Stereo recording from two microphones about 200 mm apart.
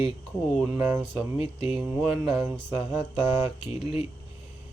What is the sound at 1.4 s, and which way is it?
Speech, 30° left (ahead or behind).